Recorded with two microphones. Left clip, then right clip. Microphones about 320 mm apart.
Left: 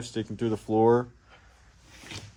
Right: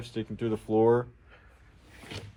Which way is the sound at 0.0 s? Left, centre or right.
Left.